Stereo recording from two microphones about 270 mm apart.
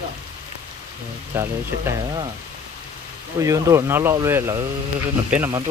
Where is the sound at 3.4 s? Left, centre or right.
Centre.